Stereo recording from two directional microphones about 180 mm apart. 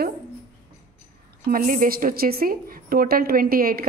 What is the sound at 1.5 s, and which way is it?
A woman's voice, 50° right (ahead or behind).